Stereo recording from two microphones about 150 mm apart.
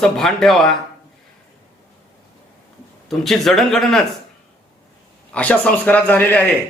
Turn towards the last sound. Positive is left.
turn(degrees=10)  # may be behind; listen again after turning